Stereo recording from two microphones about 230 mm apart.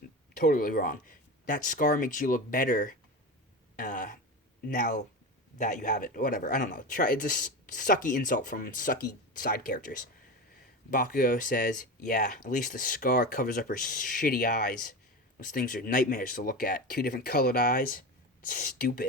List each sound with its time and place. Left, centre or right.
0.3 s speech: left
10.9 s speech: left